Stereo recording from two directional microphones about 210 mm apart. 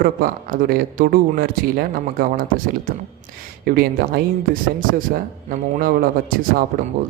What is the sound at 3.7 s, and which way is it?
A man's voice, 45° right (ahead or behind).